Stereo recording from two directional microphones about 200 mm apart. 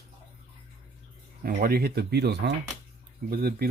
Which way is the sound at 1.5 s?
50° right (ahead or behind).